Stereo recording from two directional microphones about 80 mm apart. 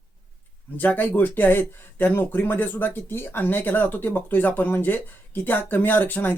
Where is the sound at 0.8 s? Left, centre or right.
Left.